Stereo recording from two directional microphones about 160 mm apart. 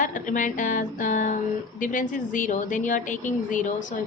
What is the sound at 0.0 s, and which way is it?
A woman's voice, 55° left (ahead or behind).